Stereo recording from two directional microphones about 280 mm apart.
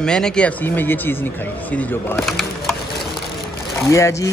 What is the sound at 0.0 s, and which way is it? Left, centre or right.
Speech, centre.